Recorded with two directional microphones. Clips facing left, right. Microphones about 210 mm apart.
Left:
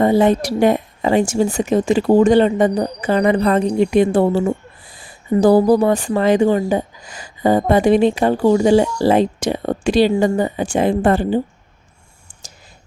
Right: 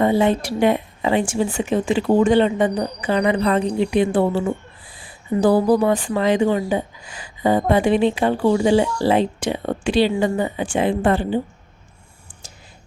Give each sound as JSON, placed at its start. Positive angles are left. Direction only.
{"t": 0.0, "sound": "a woman's voice", "side_deg": 40}